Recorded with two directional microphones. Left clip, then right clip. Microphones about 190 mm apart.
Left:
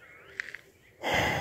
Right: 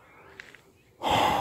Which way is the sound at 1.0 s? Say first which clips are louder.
Right 4 dB; 20° right (ahead or behind).